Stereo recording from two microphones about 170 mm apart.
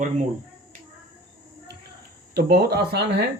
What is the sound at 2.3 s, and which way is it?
Speech, 70° right (ahead or behind).